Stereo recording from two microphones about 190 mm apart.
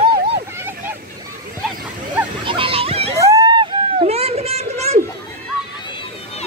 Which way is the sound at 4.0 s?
35° right (ahead or behind).